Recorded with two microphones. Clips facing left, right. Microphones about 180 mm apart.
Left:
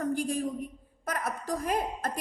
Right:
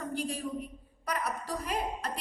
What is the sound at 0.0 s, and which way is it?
A woman's voice, 45° left (ahead or behind).